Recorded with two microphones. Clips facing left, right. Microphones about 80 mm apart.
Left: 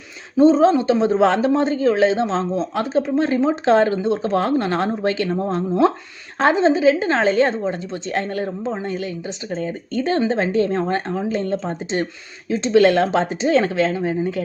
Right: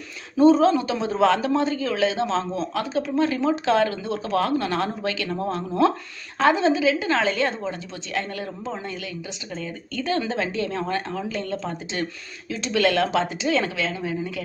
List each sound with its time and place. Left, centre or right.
0.3 s a woman's voice: left